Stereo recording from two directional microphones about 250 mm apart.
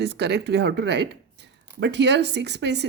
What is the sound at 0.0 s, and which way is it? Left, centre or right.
A woman's voice, right.